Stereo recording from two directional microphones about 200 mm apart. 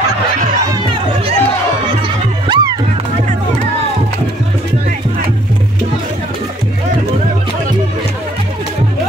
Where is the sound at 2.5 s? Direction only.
20° right (ahead or behind).